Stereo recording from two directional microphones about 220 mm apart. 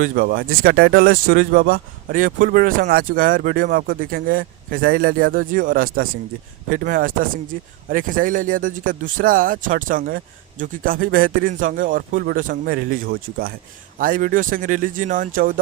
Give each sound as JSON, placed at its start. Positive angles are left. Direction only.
{"t": 0.0, "sound": "speech", "side_deg": -40}